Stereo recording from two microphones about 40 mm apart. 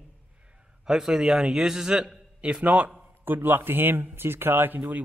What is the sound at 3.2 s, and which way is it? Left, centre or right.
Speech, right.